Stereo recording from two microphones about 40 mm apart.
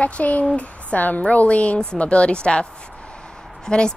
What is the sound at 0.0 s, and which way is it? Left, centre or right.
Speech, left.